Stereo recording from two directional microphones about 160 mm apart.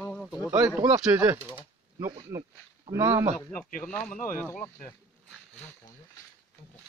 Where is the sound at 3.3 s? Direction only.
10° left (ahead or behind).